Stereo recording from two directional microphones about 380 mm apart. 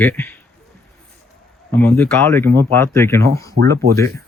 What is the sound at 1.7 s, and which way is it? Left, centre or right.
Speech, centre.